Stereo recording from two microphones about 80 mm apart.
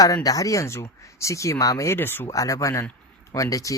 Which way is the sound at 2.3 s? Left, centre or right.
Left.